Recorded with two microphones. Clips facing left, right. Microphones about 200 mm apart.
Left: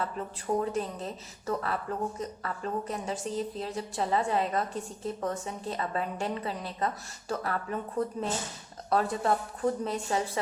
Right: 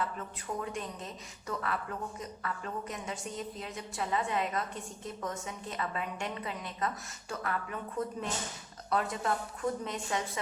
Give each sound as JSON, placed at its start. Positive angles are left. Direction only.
{"t": 0.0, "sound": "speech", "side_deg": 35}